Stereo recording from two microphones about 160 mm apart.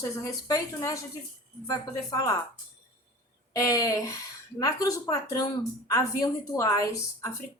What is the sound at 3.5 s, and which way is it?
Speech, 20° left (ahead or behind).